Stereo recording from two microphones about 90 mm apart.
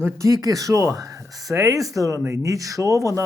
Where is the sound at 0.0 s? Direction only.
35° right (ahead or behind).